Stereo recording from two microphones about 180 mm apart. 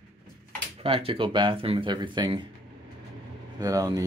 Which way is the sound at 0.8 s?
30° right (ahead or behind).